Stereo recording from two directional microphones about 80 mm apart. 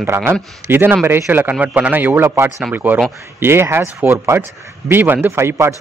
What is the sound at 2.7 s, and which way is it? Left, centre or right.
Speech, right.